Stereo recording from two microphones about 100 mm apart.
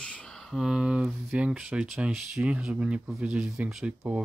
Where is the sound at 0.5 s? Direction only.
5° right (ahead or behind).